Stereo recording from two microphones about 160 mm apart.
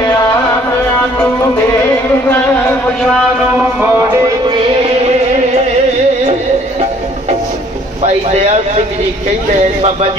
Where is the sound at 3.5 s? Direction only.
10° right (ahead or behind); by 5.2 s 40° right (ahead or behind).